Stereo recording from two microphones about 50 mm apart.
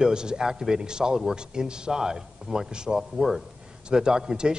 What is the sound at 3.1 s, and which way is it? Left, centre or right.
Speech, centre.